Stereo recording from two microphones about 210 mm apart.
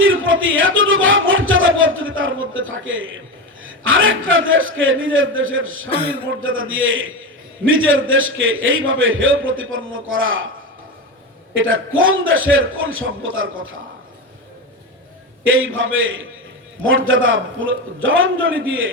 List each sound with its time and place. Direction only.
0.0 s a sound: 70° right (ahead or behind)
3.6 s a man's voice: 70° right (ahead or behind)
11.5 s a man's voice: 70° right (ahead or behind)
15.4 s a man's voice: 70° right (ahead or behind)